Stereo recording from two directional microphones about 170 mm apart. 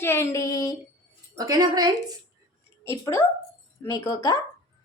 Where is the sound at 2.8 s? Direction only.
15° left (ahead or behind).